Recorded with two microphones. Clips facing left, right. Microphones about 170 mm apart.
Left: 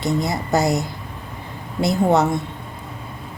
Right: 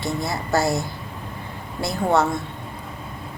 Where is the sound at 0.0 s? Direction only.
20° left (ahead or behind).